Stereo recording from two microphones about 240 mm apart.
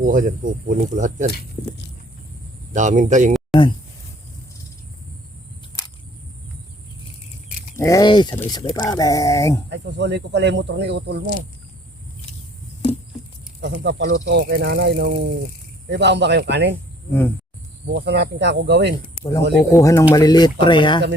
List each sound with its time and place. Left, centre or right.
0.0 s speech: right
2.7 s speech: right
7.8 s speech: centre
9.6 s speech: right
13.6 s speech: right
17.1 s speech: centre
17.9 s speech: right
19.5 s speech: centre